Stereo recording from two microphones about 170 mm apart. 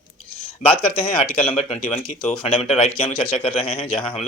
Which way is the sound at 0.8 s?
35° left (ahead or behind).